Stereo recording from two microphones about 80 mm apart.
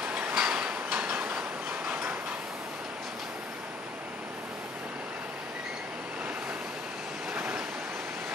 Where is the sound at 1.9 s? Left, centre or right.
Right.